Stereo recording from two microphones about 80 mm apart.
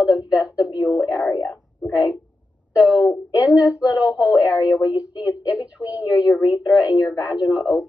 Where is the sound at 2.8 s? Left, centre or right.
Centre.